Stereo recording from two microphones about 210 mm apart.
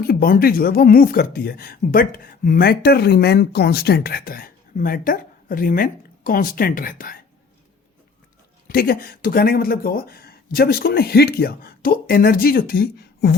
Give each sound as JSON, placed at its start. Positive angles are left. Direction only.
{"t": 0.0, "sound": "speech", "side_deg": 45}
{"t": 8.6, "sound": "speech", "side_deg": 45}